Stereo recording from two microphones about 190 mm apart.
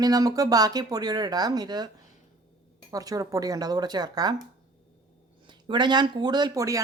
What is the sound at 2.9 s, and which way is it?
Speech, 20° right (ahead or behind).